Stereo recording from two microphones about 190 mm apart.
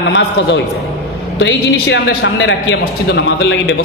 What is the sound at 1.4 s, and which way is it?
A man's voice, 75° left (ahead or behind).